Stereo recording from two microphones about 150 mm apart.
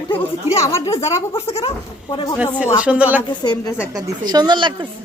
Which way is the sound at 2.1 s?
30° left (ahead or behind).